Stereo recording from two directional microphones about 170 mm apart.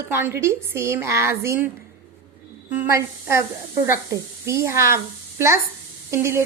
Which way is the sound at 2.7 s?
15° right (ahead or behind).